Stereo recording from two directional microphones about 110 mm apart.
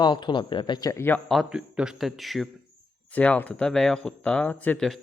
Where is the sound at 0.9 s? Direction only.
20° left (ahead or behind).